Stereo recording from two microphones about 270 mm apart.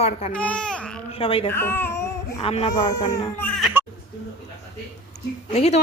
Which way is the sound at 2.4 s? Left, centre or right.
Left.